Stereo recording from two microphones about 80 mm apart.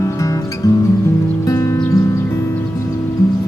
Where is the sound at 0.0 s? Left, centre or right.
Left.